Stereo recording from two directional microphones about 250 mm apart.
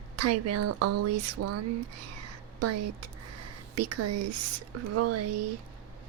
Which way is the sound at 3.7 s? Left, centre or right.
Right.